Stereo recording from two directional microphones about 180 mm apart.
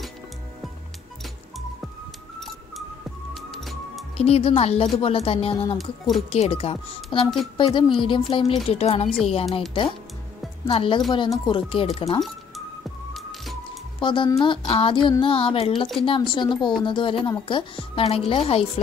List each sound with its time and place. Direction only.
3.3 s music: centre (ahead or behind)
4.2 s speech: 30° left (ahead or behind)
5.8 s a woman's voice: centre (ahead or behind)
6.3 s a woman's voice: 35° left (ahead or behind)
10.7 s a woman's voice: 30° left (ahead or behind)
13.9 s a woman's voice: 25° left (ahead or behind)